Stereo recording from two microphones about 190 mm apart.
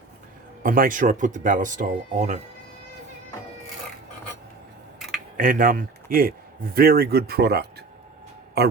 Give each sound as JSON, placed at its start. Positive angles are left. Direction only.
{"t": 0.6, "sound": "speech", "side_deg": -45}
{"t": 5.4, "sound": "speech", "side_deg": -45}